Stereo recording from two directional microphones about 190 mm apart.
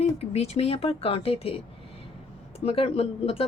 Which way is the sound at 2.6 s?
30° left (ahead or behind).